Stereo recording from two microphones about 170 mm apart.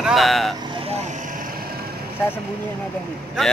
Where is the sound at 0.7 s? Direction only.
35° right (ahead or behind).